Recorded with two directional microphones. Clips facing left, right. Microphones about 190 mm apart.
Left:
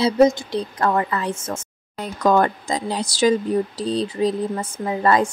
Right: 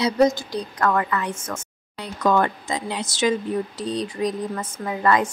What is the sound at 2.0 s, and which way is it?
Speech, 40° left (ahead or behind).